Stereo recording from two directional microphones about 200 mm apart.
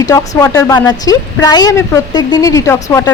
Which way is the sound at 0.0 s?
15° left (ahead or behind).